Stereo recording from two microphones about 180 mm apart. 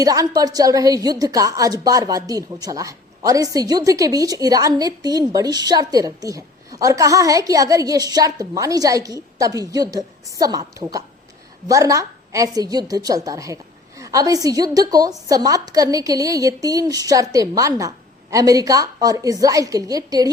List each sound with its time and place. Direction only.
0.0 s a woman's voice: 20° right (ahead or behind)